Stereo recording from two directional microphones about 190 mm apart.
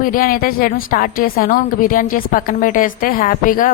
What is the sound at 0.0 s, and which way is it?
A woman's voice, 45° left (ahead or behind).